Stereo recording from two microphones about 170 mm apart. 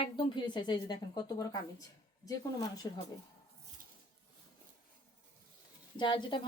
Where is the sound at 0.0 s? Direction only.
30° left (ahead or behind).